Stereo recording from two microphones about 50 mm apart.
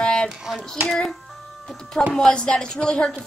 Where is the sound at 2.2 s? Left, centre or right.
Centre.